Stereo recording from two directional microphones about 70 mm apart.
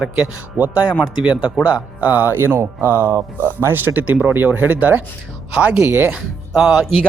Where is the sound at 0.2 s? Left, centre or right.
Right.